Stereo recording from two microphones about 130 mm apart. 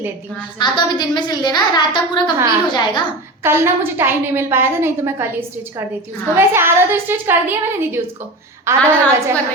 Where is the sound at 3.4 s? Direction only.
20° right (ahead or behind).